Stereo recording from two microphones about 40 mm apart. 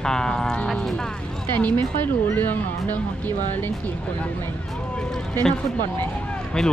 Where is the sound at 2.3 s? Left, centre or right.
Left.